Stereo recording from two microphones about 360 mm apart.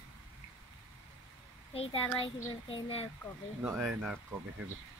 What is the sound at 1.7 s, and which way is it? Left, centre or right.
A child's voice, centre.